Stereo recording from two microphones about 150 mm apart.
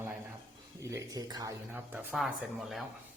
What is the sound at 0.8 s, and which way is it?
Speech, 20° right (ahead or behind).